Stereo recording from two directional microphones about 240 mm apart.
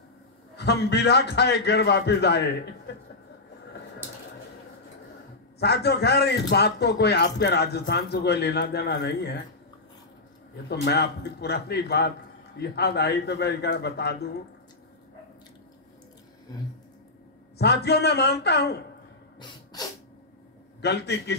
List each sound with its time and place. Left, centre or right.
0.6 s speech: left
5.6 s speech: left
10.7 s speech: left
17.6 s speech: left
19.4 s dog: centre
20.8 s speech: left